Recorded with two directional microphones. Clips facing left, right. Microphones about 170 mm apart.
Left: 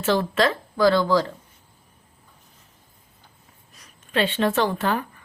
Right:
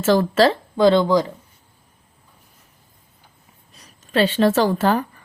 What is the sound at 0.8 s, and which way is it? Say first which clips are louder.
Speech: right 3 dB; 20° right (ahead or behind).